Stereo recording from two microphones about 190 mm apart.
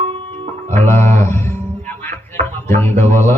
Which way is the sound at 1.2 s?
15° left (ahead or behind).